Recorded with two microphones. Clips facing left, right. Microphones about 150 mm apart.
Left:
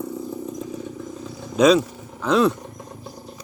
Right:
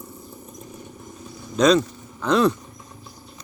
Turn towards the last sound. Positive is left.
turn(degrees=55)  # may be behind; listen again after turning